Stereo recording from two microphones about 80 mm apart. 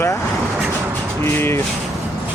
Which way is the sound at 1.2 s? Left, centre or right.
Left.